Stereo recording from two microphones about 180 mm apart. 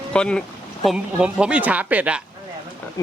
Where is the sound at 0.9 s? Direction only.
5° right (ahead or behind).